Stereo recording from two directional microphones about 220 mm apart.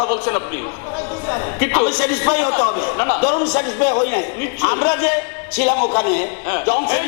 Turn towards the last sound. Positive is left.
turn(degrees=15)  # may be behind; listen again after turning